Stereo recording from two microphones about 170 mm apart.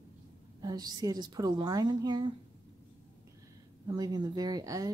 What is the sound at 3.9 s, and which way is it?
A woman's voice, 25° right (ahead or behind).